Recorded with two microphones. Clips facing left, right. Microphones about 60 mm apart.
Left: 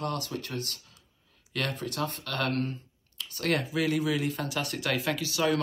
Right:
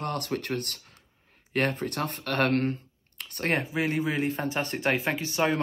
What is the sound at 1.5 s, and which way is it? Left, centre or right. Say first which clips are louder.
Speech: right 5 dB; right.